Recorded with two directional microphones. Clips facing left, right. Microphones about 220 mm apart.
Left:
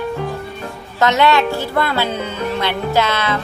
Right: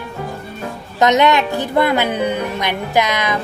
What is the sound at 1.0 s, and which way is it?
Speech, 20° right (ahead or behind).